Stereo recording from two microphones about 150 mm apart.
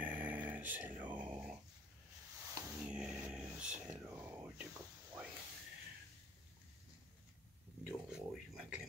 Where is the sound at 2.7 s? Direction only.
5° right (ahead or behind).